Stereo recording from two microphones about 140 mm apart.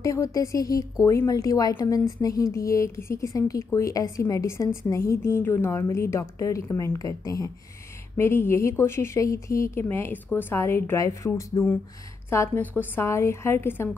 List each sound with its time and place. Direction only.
0.0 s a woman's voice: 20° left (ahead or behind)